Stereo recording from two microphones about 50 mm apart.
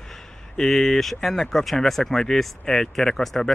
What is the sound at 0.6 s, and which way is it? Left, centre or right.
Speech, centre.